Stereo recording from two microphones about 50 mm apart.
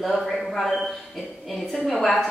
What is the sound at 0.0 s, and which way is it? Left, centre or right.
A woman's voice, centre.